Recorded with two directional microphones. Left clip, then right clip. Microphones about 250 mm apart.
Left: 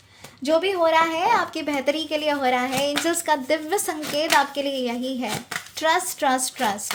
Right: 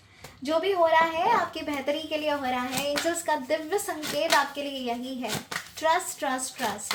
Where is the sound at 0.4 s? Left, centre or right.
Left.